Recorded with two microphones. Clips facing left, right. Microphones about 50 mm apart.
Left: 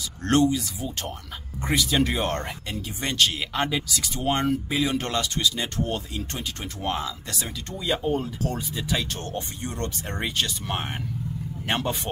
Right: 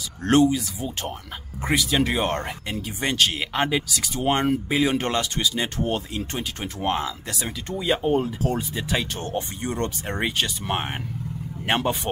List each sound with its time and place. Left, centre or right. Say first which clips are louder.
0.2 s speech: right 3 dB; centre